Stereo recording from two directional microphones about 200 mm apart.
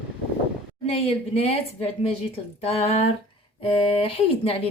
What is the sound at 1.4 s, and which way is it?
Speech, 30° left (ahead or behind).